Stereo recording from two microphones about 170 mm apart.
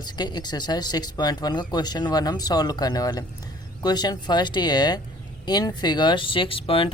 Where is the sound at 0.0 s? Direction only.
25° left (ahead or behind).